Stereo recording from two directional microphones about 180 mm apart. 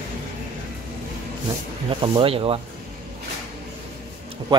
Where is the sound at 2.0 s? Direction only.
30° right (ahead or behind).